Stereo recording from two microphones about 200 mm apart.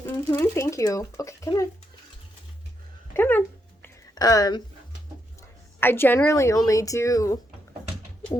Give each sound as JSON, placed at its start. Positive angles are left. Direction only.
{"t": 0.0, "sound": "speech", "side_deg": 15}
{"t": 3.2, "sound": "speech", "side_deg": 10}
{"t": 3.8, "sound": "a sound", "side_deg": 20}
{"t": 5.8, "sound": "speech", "side_deg": 10}